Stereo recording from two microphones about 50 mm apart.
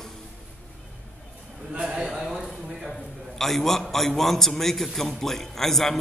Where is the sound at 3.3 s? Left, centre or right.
Centre.